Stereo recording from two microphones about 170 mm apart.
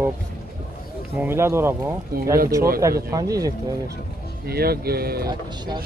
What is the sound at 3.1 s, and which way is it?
Speech, 20° right (ahead or behind).